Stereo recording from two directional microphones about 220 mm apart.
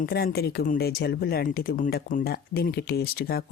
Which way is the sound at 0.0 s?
45° left (ahead or behind).